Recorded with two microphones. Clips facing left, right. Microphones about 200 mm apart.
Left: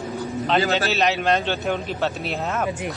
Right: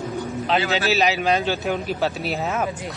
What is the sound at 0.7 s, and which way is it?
A man's voice, centre (ahead or behind).